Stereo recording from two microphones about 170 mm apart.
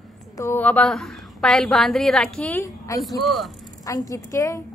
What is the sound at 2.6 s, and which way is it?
Speech, 20° left (ahead or behind).